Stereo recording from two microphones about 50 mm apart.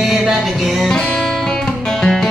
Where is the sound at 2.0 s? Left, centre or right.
Centre.